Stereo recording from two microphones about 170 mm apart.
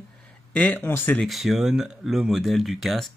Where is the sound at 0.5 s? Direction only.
10° left (ahead or behind).